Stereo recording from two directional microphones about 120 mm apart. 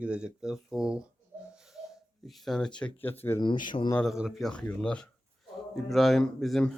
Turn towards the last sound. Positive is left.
turn(degrees=5)  # may be behind; listen again after turning